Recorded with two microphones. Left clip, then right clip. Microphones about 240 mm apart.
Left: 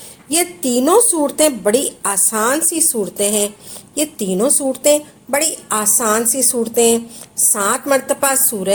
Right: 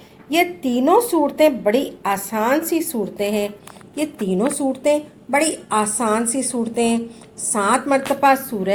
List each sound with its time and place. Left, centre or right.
0.3 s a woman's voice: left